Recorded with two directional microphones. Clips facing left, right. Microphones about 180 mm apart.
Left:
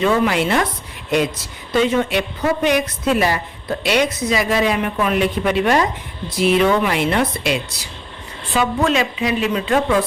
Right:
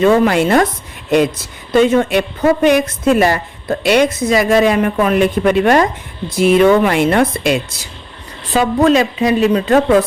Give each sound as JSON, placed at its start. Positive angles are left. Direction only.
{"t": 0.0, "sound": "a woman's voice", "side_deg": -45}
{"t": 1.7, "sound": "a woman's voice", "side_deg": -50}
{"t": 8.5, "sound": "a woman's voice", "side_deg": -40}